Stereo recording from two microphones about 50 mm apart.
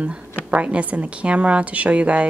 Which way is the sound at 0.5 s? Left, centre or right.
Right.